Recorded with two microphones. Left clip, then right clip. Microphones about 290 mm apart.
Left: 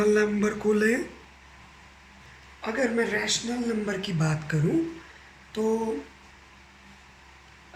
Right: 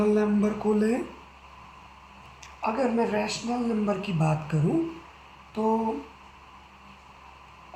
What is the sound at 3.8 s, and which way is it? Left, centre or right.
Speech, left.